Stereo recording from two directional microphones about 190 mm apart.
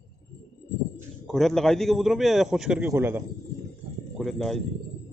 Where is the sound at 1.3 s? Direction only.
Centre (ahead or behind).